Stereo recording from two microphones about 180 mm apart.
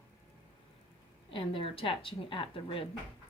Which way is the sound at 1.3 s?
30° left (ahead or behind).